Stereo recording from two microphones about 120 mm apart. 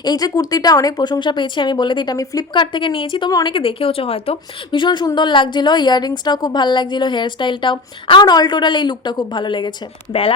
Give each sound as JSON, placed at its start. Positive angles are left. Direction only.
{"t": 0.0, "sound": "a woman's voice", "side_deg": 35}
{"t": 3.2, "sound": "a woman's voice", "side_deg": 35}
{"t": 3.5, "sound": "a woman's voice", "side_deg": 50}